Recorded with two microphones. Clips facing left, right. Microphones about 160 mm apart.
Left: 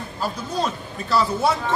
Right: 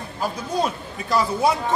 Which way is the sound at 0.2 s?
10° right (ahead or behind).